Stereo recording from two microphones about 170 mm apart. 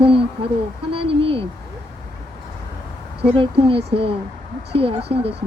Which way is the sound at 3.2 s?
30° right (ahead or behind).